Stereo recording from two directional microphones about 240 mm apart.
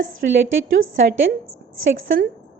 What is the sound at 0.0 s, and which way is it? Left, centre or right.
Speech, right.